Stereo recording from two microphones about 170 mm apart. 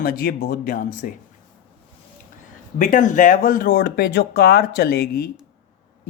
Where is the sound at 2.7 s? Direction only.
50° left (ahead or behind).